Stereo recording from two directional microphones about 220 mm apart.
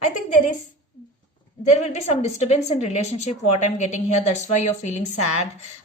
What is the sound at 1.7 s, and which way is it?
A woman's voice, 30° left (ahead or behind).